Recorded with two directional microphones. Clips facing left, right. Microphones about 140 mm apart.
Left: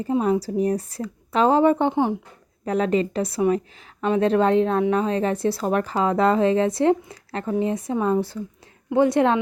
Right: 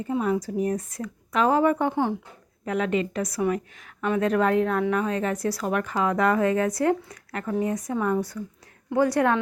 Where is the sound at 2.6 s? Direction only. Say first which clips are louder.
Left 4 dB; 35° left (ahead or behind).